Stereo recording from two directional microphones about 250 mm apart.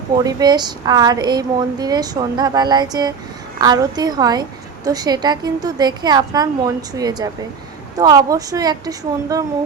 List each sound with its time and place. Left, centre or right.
0.2 s a woman's voice: centre